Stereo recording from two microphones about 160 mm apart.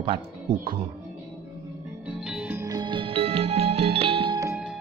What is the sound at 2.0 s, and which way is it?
Music, 5° right (ahead or behind).